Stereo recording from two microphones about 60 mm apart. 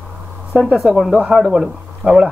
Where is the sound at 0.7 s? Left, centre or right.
Centre.